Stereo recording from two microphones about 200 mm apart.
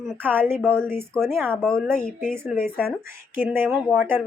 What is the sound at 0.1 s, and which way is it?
Speech, 10° right (ahead or behind).